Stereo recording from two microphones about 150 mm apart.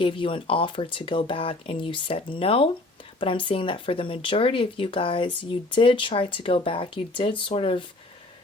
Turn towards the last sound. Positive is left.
turn(degrees=35)  # may be behind; listen again after turning